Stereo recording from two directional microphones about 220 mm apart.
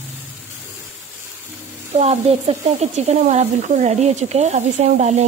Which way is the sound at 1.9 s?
30° right (ahead or behind).